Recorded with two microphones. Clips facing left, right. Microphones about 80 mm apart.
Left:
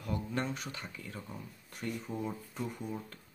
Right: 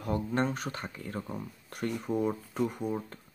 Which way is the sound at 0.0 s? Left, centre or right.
Right.